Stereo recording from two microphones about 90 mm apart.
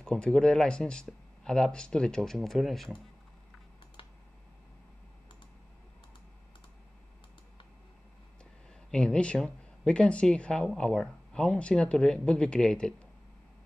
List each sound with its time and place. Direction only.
0.0 s speech: 10° left (ahead or behind)
8.9 s speech: 10° left (ahead or behind)